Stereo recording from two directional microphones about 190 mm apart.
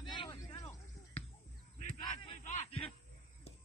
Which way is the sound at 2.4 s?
35° left (ahead or behind).